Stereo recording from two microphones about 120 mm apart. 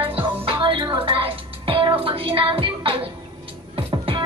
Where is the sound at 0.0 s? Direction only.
45° right (ahead or behind).